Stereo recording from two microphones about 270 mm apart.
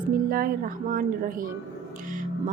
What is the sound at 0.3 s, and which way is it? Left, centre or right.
Speech, right.